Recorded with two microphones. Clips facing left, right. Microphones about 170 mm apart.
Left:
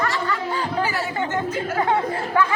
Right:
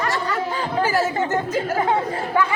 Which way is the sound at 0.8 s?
45° right (ahead or behind).